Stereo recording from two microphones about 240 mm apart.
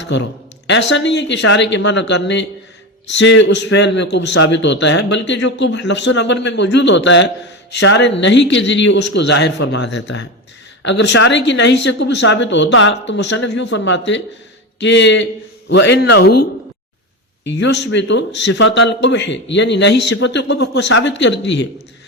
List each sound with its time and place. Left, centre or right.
0.7 s a man's voice: left
17.5 s a man's voice: left